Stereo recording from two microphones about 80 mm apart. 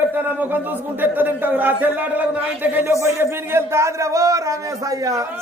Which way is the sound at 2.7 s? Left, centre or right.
Right.